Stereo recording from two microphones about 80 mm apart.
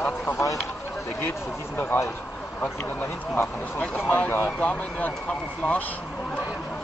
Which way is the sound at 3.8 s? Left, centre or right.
Left.